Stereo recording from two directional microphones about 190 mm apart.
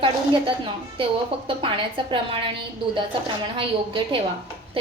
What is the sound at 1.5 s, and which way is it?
Speech, 30° right (ahead or behind).